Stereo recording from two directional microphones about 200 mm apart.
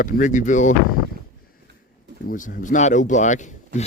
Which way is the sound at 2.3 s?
40° left (ahead or behind).